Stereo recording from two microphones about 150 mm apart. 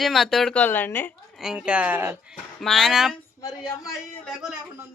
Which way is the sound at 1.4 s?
5° right (ahead or behind).